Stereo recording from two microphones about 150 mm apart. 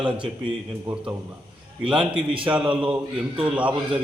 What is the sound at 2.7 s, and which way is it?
Speech, 5° right (ahead or behind).